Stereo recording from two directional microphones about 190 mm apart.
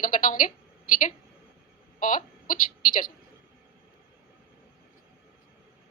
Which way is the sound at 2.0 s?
45° left (ahead or behind).